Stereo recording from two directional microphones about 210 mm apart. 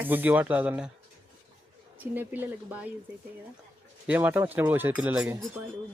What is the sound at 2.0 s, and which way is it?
Speech, 10° right (ahead or behind).